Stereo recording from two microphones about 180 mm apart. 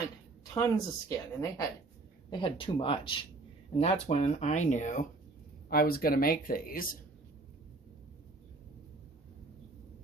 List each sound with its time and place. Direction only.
0.5 s speech: 15° left (ahead or behind); by 5.0 s 45° left (ahead or behind)
5.6 s speech: 55° left (ahead or behind)